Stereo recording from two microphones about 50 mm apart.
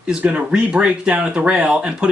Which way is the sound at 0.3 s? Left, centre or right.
Right.